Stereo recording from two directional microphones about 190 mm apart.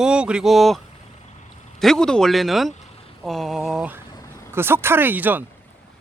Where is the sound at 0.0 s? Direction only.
5° right (ahead or behind).